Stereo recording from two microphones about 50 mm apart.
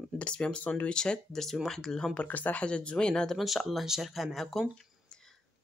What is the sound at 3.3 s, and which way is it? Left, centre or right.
Speech, centre.